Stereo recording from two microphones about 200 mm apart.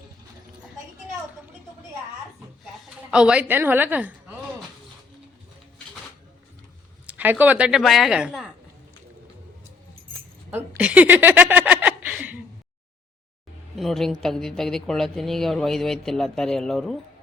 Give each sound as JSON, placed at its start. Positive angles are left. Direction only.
{"t": 3.1, "sound": "a woman's voice", "side_deg": -5}
{"t": 7.1, "sound": "speech", "side_deg": -10}
{"t": 10.5, "sound": "chuckle", "side_deg": -5}
{"t": 13.7, "sound": "speech", "side_deg": 0}